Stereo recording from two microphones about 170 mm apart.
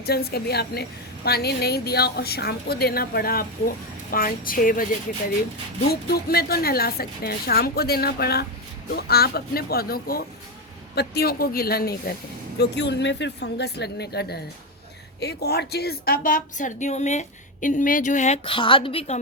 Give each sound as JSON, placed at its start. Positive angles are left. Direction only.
{"t": 0.0, "sound": "a woman's voice", "side_deg": 65}
{"t": 5.9, "sound": "a woman's voice", "side_deg": 65}
{"t": 12.5, "sound": "a woman's voice", "side_deg": 90}
{"t": 18.4, "sound": "a woman's voice", "side_deg": 30}